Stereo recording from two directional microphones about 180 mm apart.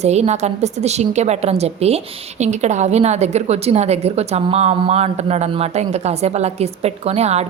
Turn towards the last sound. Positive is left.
turn(degrees=-35)  # may be behind; listen again after turning